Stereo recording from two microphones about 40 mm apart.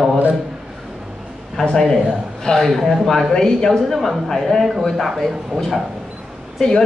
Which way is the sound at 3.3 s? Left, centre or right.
Centre.